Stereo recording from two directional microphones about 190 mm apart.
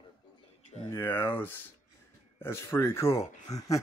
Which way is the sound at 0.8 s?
10° left (ahead or behind).